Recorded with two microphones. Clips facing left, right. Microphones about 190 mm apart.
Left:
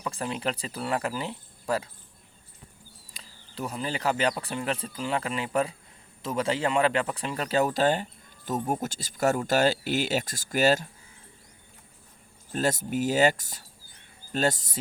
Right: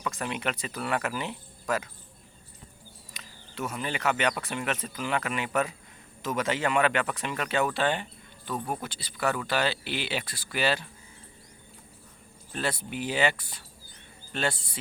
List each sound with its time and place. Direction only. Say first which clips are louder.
0.0 s speech: left 1 dB; 30° left (ahead or behind)
3.1 s speech: right 3 dB; 35° left (ahead or behind)
12.5 s speech: left 5 dB; 40° left (ahead or behind)